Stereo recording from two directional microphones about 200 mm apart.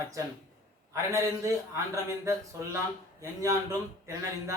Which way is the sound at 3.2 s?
15° right (ahead or behind).